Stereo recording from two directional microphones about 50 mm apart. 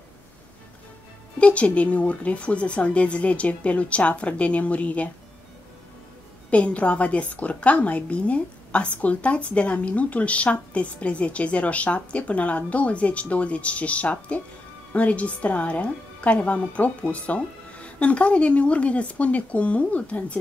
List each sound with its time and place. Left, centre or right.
1.4 s a woman's voice: left
6.5 s a woman's voice: left